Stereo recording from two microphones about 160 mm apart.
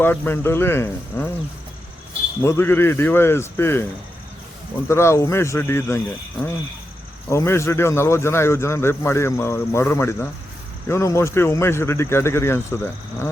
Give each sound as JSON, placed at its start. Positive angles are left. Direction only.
{"t": 0.0, "sound": "speech", "side_deg": 15}
{"t": 2.4, "sound": "speech", "side_deg": 15}
{"t": 4.9, "sound": "speech", "side_deg": 15}
{"t": 7.3, "sound": "speech", "side_deg": 15}